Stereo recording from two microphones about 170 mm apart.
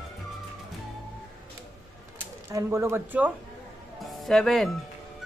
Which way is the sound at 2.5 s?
15° right (ahead or behind).